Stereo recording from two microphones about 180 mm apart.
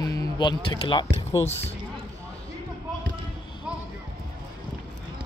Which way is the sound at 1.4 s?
35° left (ahead or behind).